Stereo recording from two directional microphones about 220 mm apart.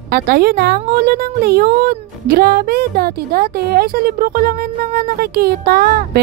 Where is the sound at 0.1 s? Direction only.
40° right (ahead or behind).